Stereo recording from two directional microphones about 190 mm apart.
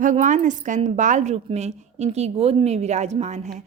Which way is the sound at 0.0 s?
40° right (ahead or behind).